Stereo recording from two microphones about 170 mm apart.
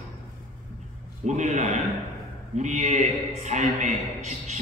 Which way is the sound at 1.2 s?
45° right (ahead or behind).